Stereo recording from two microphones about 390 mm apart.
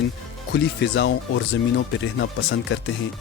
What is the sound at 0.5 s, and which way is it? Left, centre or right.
Speech, left.